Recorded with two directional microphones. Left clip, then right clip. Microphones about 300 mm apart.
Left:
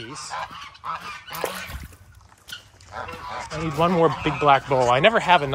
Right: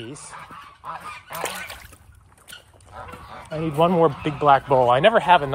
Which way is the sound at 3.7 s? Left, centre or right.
Centre.